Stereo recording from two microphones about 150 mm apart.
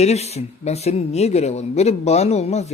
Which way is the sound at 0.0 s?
45° left (ahead or behind).